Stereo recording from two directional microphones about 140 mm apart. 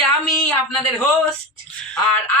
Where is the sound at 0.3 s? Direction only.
Centre (ahead or behind).